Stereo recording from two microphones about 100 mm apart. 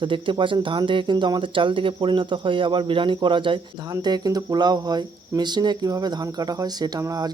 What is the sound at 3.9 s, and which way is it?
Speech, 40° right (ahead or behind).